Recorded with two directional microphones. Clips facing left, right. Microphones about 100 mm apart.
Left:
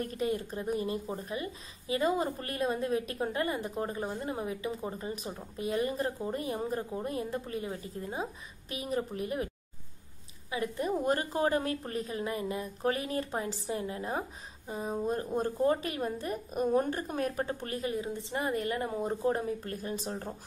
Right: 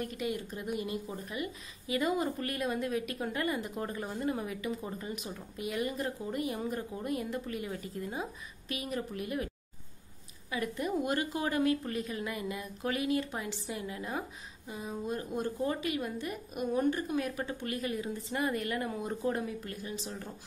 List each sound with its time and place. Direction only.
0.0 s speech: 40° left (ahead or behind)
10.5 s speech: 30° left (ahead or behind)